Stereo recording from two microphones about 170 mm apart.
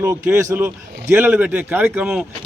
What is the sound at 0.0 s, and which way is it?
Speech, 15° right (ahead or behind).